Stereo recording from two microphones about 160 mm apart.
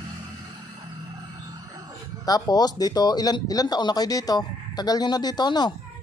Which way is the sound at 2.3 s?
25° left (ahead or behind).